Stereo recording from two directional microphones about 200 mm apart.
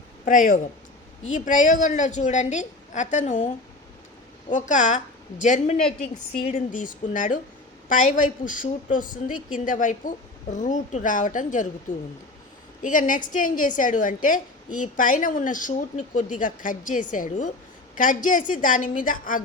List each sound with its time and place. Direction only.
0.3 s a woman's voice: 40° left (ahead or behind)
12.8 s a woman's voice: 40° left (ahead or behind)